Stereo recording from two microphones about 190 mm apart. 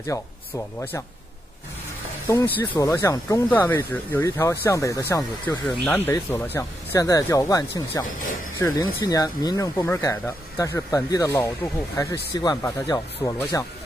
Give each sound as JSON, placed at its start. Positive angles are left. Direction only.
{"t": 0.0, "sound": "speech", "side_deg": 15}
{"t": 2.2, "sound": "speech", "side_deg": 10}